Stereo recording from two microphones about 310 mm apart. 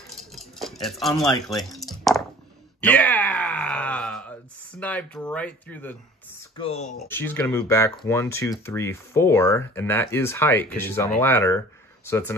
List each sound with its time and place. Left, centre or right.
0.4 s a sound: centre
2.8 s groan: centre
6.5 s speech: centre
7.1 s speech: centre